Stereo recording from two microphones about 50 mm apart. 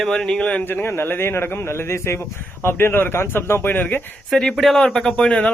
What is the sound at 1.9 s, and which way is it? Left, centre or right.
Speech, left.